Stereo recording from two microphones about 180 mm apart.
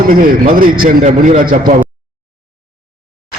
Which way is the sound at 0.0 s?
50° right (ahead or behind).